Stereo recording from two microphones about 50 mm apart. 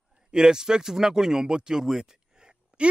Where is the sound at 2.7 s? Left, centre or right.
Right.